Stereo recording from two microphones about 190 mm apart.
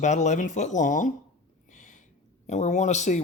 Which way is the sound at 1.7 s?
40° left (ahead or behind).